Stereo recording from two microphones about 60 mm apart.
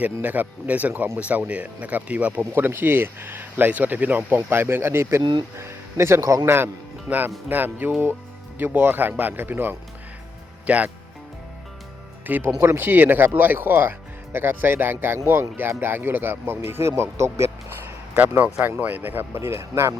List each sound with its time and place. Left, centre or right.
0.0 s speech: right
2.5 s speech: right
4.3 s speech: right
6.4 s speech: right
10.7 s speech: right
12.2 s speech: right
17.0 s speech: right
18.1 s speech: right
19.3 s speech: right